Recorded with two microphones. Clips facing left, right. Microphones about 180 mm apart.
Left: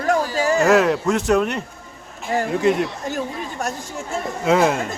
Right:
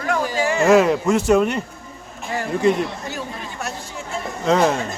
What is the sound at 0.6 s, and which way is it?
Speech, centre (ahead or behind).